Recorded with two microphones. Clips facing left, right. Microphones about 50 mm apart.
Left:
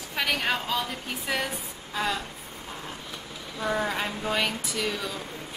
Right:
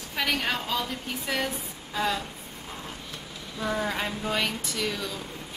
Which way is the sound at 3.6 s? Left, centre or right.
Centre.